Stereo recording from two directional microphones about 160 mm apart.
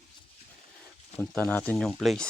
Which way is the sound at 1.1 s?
5° left (ahead or behind).